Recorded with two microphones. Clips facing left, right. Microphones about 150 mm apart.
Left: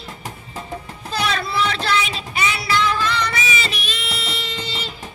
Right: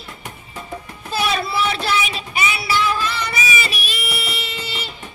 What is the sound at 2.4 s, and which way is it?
Music, 10° right (ahead or behind).